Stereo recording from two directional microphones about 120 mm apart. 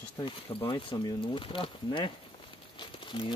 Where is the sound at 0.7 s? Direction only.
40° left (ahead or behind).